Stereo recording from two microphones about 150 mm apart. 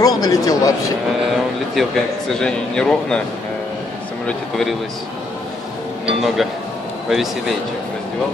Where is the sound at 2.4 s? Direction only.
5° left (ahead or behind).